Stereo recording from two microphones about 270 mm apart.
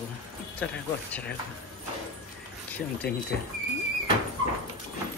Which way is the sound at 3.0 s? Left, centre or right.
Left.